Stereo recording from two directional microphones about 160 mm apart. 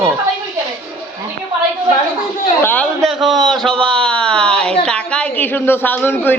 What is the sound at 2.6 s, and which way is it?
Speech, 10° left (ahead or behind).